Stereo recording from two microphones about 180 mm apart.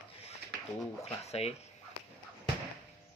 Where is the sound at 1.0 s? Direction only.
35° left (ahead or behind).